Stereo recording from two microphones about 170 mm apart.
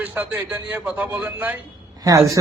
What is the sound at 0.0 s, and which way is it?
A man's voice, 10° right (ahead or behind).